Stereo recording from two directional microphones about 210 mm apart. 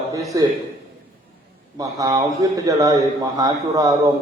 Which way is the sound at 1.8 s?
15° right (ahead or behind).